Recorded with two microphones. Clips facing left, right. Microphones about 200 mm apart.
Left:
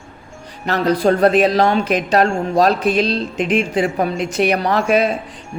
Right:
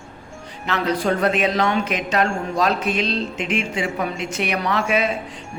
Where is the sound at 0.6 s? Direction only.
40° left (ahead or behind).